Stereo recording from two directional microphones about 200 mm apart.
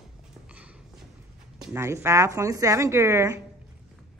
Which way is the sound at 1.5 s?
15° right (ahead or behind).